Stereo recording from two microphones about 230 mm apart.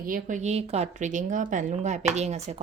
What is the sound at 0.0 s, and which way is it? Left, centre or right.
A woman's voice, right.